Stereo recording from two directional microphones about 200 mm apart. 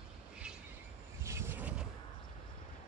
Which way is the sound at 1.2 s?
15° right (ahead or behind).